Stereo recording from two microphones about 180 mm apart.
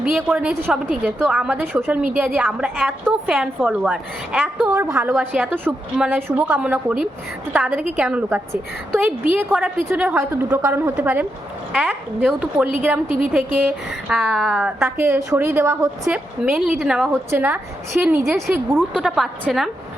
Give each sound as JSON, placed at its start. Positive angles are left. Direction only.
{"t": 0.0, "sound": "a woman's voice", "side_deg": -5}
{"t": 4.7, "sound": "a woman's voice", "side_deg": -15}
{"t": 14.1, "sound": "a woman's voice", "side_deg": 0}
{"t": 18.9, "sound": "a woman's voice", "side_deg": 0}